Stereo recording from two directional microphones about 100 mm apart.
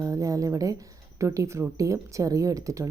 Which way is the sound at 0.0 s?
35° right (ahead or behind).